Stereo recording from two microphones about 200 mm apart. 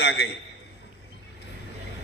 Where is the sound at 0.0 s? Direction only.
60° left (ahead or behind).